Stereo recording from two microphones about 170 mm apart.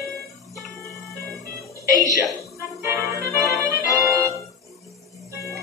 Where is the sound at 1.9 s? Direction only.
20° right (ahead or behind).